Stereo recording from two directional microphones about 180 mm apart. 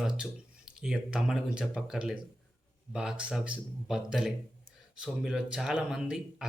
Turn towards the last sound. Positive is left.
turn(degrees=-5)  # may be behind; listen again after turning